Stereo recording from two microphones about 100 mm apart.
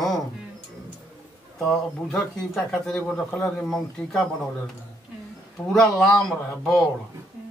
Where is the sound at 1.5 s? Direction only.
5° left (ahead or behind).